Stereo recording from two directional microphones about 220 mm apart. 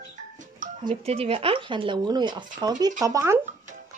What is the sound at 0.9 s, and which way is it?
Speech, 25° right (ahead or behind).